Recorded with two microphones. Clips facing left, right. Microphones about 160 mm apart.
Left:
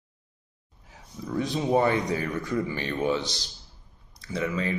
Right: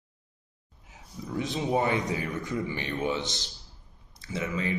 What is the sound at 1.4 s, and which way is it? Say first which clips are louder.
Speech: left 4 dB; 20° right (ahead or behind).